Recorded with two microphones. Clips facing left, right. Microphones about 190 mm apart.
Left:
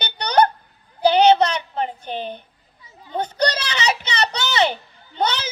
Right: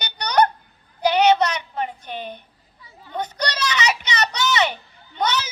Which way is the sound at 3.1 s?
30° left (ahead or behind).